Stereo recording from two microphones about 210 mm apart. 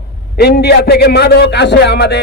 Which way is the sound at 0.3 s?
50° left (ahead or behind).